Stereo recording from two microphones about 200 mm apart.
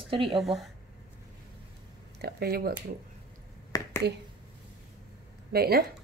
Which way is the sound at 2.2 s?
50° right (ahead or behind).